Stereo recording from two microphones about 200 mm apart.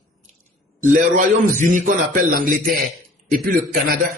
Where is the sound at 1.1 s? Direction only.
40° right (ahead or behind).